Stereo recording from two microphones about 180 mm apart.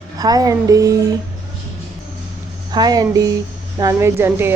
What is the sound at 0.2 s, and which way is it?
Music, 20° right (ahead or behind).